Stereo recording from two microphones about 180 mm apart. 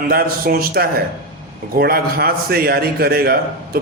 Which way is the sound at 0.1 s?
55° right (ahead or behind).